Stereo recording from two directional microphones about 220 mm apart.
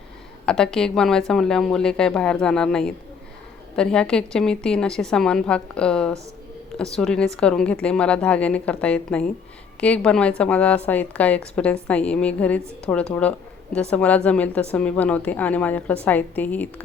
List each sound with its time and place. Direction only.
0.4 s a woman's voice: 5° left (ahead or behind)